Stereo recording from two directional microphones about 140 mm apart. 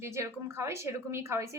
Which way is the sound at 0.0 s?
20° right (ahead or behind).